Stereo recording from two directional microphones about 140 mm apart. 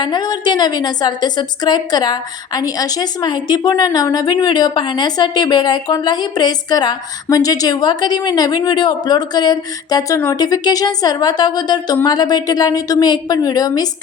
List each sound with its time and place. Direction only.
0.0 s a woman's voice: 30° left (ahead or behind)